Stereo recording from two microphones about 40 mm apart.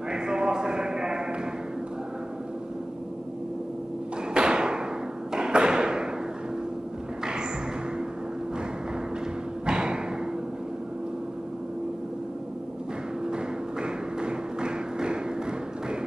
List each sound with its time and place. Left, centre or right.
0.1 s a sound: right
4.3 s thump: right
9.7 s thump: right
13.3 s music: right